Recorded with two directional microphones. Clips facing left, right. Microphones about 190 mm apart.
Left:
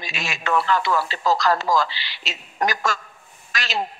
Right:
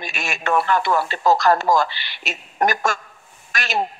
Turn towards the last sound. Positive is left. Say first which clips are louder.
# right 3 dB
turn(degrees=-55)  # may be behind; listen again after turning